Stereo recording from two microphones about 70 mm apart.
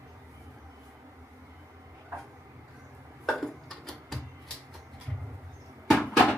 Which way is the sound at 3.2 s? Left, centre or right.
Centre.